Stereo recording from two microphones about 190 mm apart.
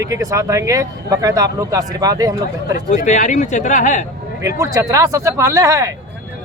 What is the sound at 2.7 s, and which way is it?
Speech, 40° left (ahead or behind).